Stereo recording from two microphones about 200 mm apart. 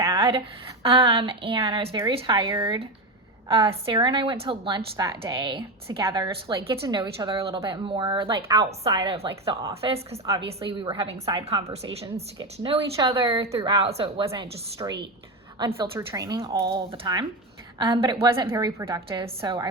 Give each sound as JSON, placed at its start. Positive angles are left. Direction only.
{"t": 0.0, "sound": "a woman's voice", "side_deg": -15}
{"t": 3.9, "sound": "a woman's voice", "side_deg": -25}